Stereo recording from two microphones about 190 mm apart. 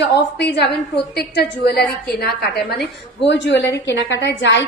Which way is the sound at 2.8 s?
65° left (ahead or behind).